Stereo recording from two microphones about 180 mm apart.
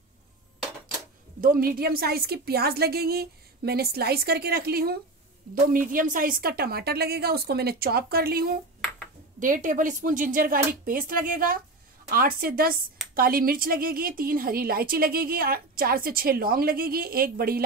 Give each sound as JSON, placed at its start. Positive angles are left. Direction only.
{"t": 1.4, "sound": "speech", "side_deg": -55}
{"t": 9.4, "sound": "speech", "side_deg": -45}